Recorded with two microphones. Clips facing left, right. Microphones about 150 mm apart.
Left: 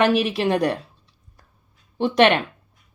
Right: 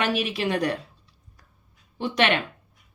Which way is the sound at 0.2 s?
40° left (ahead or behind).